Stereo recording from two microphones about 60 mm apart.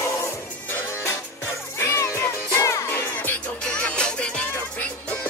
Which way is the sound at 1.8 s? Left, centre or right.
Left.